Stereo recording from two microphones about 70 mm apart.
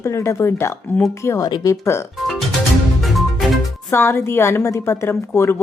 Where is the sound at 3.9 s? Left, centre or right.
Left.